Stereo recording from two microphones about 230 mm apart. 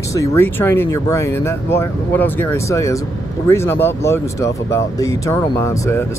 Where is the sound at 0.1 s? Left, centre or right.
Centre.